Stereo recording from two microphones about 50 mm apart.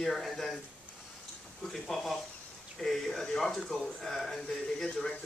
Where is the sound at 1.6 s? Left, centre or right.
Centre.